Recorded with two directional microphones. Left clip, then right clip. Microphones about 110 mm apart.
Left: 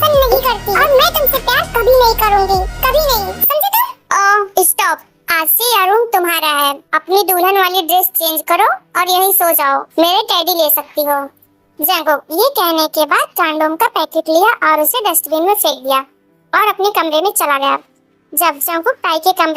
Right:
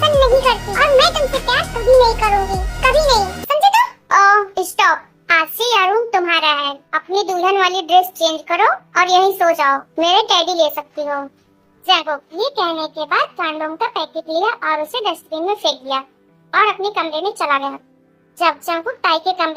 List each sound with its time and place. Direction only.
0.5 s music: 25° left (ahead or behind)
1.2 s music: centre (ahead or behind)
3.5 s child singing: 25° left (ahead or behind)
7.5 s a child's voice: 20° left (ahead or behind)